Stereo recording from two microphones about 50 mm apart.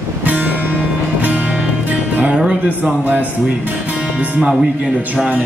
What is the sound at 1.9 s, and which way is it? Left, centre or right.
Music, right.